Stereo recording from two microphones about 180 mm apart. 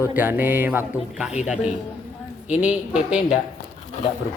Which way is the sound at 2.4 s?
10° right (ahead or behind).